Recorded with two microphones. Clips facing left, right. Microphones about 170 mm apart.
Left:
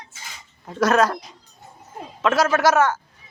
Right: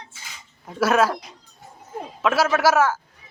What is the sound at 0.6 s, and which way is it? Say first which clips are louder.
Speech: left 1 dB; 5° right (ahead or behind).